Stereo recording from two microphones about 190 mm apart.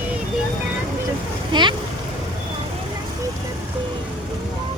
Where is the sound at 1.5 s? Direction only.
25° right (ahead or behind).